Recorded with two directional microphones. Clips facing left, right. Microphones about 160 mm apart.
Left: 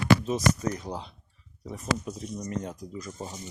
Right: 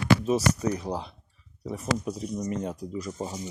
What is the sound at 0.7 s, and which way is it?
Speech, 30° right (ahead or behind).